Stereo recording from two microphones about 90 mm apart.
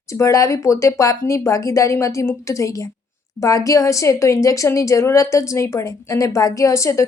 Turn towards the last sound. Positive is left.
turn(degrees=35)  # may be behind; listen again after turning